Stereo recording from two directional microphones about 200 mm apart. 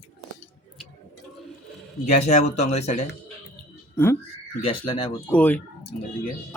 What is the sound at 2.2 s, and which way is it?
Speech, 35° left (ahead or behind).